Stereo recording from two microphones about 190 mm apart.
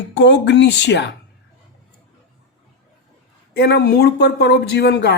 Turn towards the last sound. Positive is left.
turn(degrees=65)  # may be behind; listen again after turning